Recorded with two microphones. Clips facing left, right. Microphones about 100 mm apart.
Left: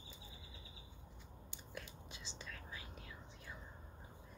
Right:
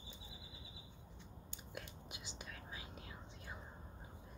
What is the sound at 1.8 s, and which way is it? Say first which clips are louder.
Whispering: right 1 dB; 15° right (ahead or behind).